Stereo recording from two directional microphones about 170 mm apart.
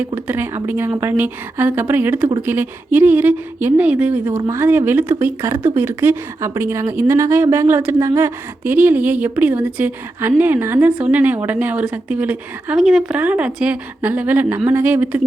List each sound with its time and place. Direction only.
0.3 s a woman's voice: 10° right (ahead or behind)